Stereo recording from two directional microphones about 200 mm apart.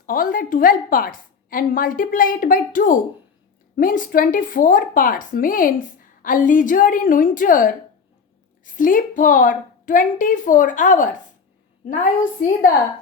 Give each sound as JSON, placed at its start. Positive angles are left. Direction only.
{"t": 0.0, "sound": "a woman's voice", "side_deg": 45}
{"t": 12.4, "sound": "a woman's voice", "side_deg": 45}